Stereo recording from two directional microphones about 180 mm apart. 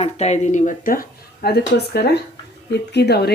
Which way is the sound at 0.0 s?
35° left (ahead or behind).